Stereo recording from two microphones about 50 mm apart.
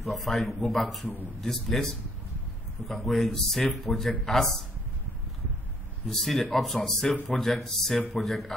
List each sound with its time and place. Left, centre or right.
0.0 s a man's voice: centre
6.0 s a man's voice: centre